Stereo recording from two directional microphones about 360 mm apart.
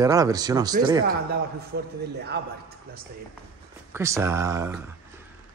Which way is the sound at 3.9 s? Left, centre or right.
Centre.